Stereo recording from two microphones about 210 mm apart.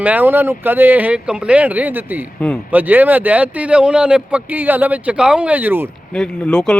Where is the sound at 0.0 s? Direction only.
10° right (ahead or behind).